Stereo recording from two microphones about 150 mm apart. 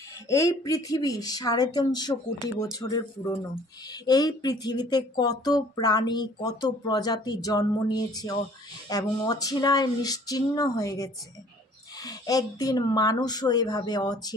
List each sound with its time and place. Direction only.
0.3 s speech: 20° left (ahead or behind)